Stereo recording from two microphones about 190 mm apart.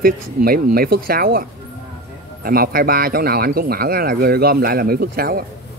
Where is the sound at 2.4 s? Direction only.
50° right (ahead or behind).